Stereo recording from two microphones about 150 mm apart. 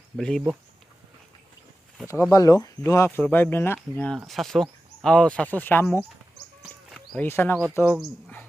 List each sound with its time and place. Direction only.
0.2 s speech: 5° left (ahead or behind)
2.3 s speech: 25° left (ahead or behind)
6.6 s a sound: centre (ahead or behind)
7.3 s speech: 15° left (ahead or behind)